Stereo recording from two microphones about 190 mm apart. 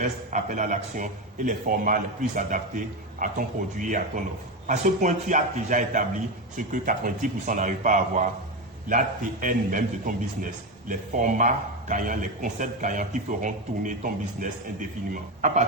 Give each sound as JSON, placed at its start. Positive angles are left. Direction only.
{"t": 0.0, "sound": "a man's voice", "side_deg": -40}